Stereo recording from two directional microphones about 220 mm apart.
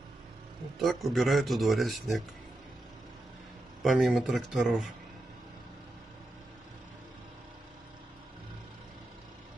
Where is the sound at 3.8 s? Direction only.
Centre (ahead or behind).